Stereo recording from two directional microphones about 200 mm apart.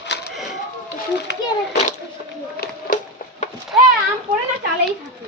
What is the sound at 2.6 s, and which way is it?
Run, 45° left (ahead or behind).